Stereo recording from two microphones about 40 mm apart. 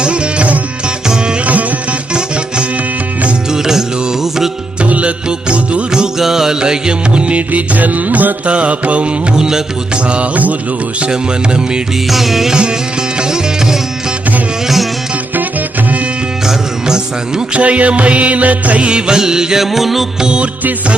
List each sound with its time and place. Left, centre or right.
0.0 s music: right
3.5 s music: centre
4.8 s music: right
6.1 s music: centre; by 8.5 s right
8.5 s music: right
9.3 s music: centre
10.1 s music: right
12.1 s music: centre
13.1 s music: centre
16.5 s music: centre
17.6 s music: right; by 19.6 s centre
19.7 s music: centre
20.2 s music: right